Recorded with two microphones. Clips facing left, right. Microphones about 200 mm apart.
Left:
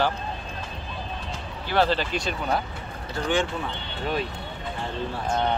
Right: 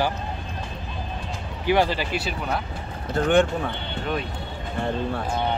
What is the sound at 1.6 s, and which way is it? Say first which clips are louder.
Speech: right 2 dB; 15° right (ahead or behind).